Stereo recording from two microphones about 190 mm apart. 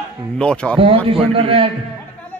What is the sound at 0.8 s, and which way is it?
Speech, 30° right (ahead or behind).